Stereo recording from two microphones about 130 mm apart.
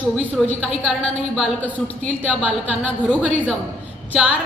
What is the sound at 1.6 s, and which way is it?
Speech, 10° left (ahead or behind).